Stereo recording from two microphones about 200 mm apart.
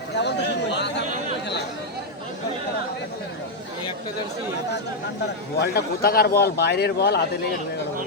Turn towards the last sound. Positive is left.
turn(degrees=55)  # may be behind; listen again after turning